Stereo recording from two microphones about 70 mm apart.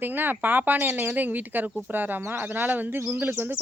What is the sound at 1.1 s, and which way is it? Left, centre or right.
Speech, right.